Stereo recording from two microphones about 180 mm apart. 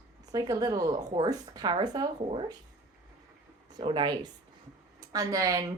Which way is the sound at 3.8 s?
25° right (ahead or behind).